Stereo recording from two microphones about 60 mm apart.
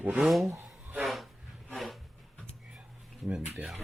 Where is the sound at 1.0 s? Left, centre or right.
Centre.